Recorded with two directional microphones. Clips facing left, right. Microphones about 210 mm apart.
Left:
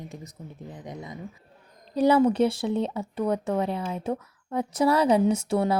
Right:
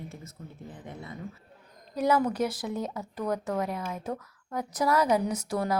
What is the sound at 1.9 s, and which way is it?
Speech, 30° left (ahead or behind).